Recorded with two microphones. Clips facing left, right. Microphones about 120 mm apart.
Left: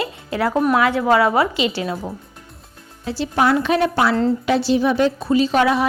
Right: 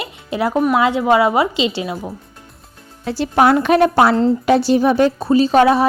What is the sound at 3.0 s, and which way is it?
A woman's voice, 55° right (ahead or behind).